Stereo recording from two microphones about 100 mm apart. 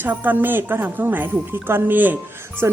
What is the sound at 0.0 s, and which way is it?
Speech, 15° right (ahead or behind).